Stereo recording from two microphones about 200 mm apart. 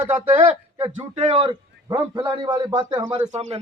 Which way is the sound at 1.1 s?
30° right (ahead or behind).